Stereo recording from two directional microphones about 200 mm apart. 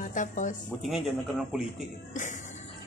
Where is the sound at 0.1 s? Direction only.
40° left (ahead or behind).